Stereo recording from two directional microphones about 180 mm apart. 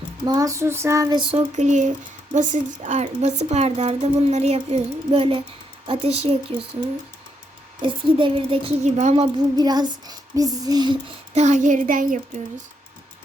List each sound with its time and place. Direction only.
0.3 s speech: 20° right (ahead or behind)
7.8 s speech: 25° right (ahead or behind)
11.3 s a child's voice: 40° right (ahead or behind)